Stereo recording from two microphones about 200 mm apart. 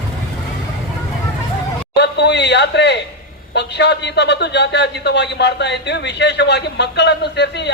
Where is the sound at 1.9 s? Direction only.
55° left (ahead or behind).